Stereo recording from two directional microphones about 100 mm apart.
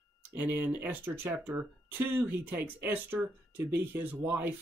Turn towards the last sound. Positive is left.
turn(degrees=-20)  # may be behind; listen again after turning